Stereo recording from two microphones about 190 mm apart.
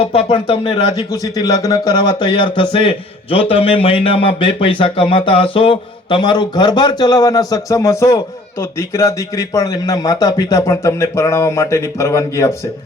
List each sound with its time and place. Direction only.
0.0 s speech: 30° left (ahead or behind); by 12.5 s 15° left (ahead or behind)